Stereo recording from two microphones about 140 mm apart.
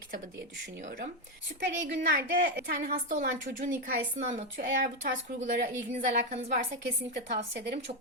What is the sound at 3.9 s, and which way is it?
Speech, 70° right (ahead or behind).